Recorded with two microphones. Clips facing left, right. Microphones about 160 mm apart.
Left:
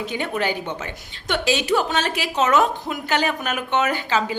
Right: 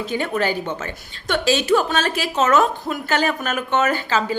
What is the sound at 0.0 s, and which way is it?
A woman's voice, 15° left (ahead or behind).